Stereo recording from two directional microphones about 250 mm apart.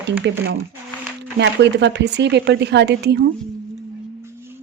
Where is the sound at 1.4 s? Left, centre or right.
Right.